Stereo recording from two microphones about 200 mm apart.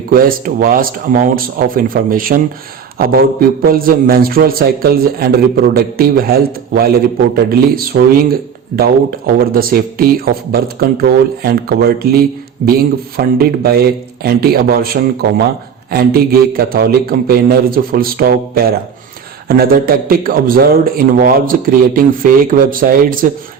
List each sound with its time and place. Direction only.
0.1 s a man's voice: 45° right (ahead or behind)
3.6 s a man's voice: 45° right (ahead or behind)